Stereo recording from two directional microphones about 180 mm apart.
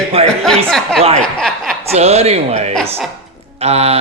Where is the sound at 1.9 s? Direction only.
35° right (ahead or behind).